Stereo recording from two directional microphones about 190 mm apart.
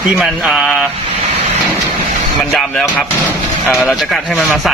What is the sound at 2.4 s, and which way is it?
Speech, centre (ahead or behind).